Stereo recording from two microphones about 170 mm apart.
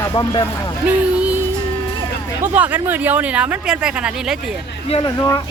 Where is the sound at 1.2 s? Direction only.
10° right (ahead or behind).